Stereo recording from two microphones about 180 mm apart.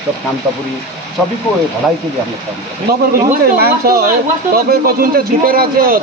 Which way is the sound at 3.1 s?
55° right (ahead or behind).